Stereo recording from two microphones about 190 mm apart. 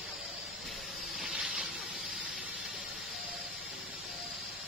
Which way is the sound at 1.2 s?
5° right (ahead or behind).